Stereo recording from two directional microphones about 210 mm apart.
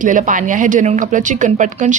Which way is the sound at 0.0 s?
40° right (ahead or behind).